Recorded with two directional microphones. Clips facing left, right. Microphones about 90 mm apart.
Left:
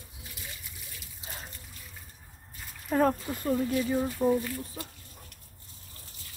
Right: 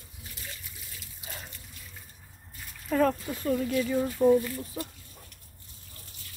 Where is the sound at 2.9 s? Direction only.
25° left (ahead or behind).